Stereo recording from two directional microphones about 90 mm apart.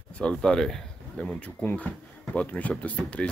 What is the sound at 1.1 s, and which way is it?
Speech, 15° left (ahead or behind).